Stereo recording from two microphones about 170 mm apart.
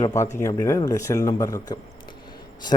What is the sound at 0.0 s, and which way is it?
A man's voice, 20° left (ahead or behind).